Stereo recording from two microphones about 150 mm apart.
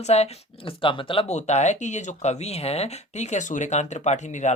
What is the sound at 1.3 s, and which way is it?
Speech, 50° left (ahead or behind).